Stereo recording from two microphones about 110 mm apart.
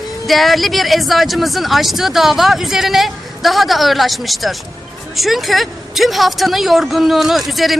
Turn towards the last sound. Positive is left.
turn(degrees=0)  # may be behind; listen again after turning